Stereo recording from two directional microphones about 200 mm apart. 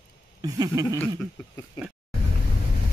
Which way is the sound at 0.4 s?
20° right (ahead or behind).